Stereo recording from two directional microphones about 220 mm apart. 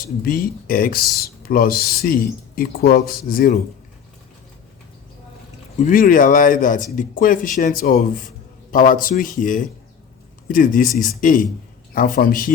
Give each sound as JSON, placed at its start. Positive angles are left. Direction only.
{"t": 0.3, "sound": "speech", "side_deg": 40}
{"t": 5.7, "sound": "speech", "side_deg": 35}